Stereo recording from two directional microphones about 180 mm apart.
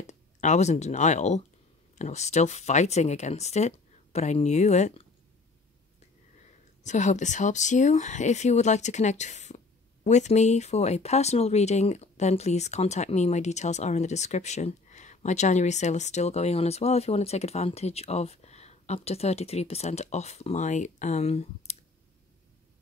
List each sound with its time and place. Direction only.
0.0 s speech: 40° left (ahead or behind)
6.8 s speech: 40° left (ahead or behind)